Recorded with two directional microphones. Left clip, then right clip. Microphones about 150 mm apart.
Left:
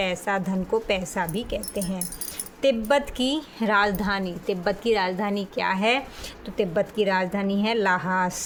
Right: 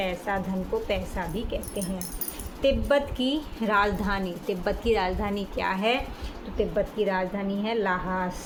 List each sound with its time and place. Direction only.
0.0 s a woman's voice: 55° left (ahead or behind)
6.6 s a woman's voice: 55° left (ahead or behind)